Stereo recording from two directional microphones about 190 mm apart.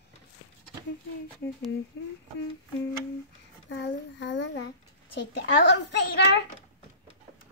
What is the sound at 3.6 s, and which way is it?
A child's voice, 65° left (ahead or behind).